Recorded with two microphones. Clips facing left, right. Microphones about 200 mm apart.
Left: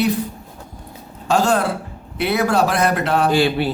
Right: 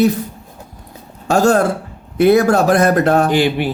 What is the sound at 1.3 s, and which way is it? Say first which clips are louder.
Speech: right 4 dB; 45° right (ahead or behind).